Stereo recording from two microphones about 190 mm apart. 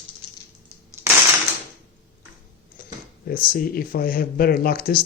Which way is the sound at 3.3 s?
50° left (ahead or behind).